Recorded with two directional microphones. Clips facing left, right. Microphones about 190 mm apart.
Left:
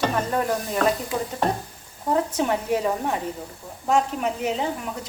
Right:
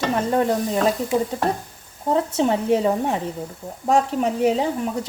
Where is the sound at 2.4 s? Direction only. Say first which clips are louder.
Right 4 dB; 25° right (ahead or behind).